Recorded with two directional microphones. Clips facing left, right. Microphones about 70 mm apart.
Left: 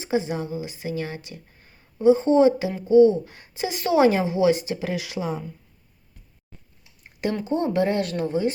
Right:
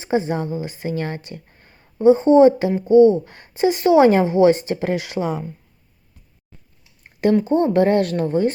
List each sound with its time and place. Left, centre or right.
0.0 s a woman's voice: right
4.0 s a woman's voice: right
7.4 s speech: right